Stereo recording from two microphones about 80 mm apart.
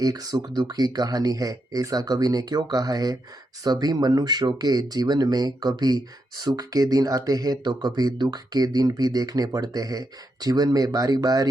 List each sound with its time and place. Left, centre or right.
0.0 s speech: right